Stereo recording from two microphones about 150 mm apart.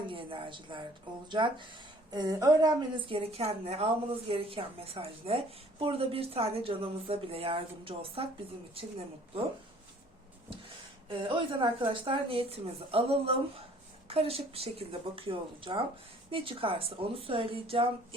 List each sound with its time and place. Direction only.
0.1 s a woman's voice: 35° right (ahead or behind)
11.1 s a woman's voice: 35° right (ahead or behind)